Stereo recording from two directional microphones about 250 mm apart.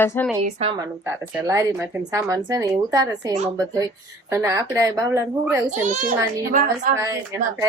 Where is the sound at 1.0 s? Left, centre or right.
Centre.